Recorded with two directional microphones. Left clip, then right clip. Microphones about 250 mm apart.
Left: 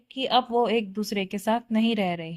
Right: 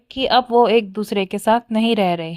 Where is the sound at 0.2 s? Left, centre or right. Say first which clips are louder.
Right 8 dB; right.